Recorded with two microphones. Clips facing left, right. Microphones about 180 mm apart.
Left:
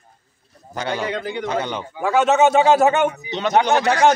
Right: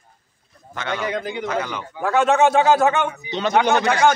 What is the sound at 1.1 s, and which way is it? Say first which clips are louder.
Speech: even; 15° right (ahead or behind).